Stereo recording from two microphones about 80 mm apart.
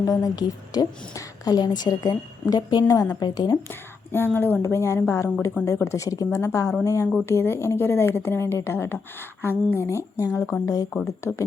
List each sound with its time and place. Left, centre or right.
0.0 s a woman's voice: left
2.9 s a woman's voice: left
3.7 s a sound: left
4.6 s speech: left
7.3 s speech: left